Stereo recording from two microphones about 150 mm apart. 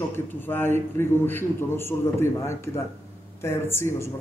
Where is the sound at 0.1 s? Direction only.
15° left (ahead or behind).